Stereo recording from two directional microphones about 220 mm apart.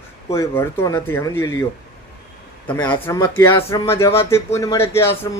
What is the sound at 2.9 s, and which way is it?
Speech, 15° left (ahead or behind).